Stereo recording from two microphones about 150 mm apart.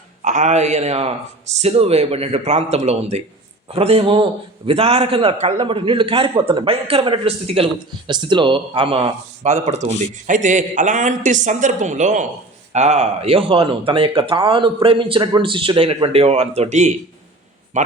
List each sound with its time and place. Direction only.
0.2 s a man's voice: 55° right (ahead or behind); by 9.0 s 35° right (ahead or behind)
9.4 s a man's voice: 50° right (ahead or behind)